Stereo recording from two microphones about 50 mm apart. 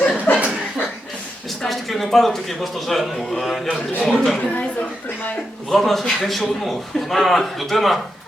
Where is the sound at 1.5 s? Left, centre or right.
Centre.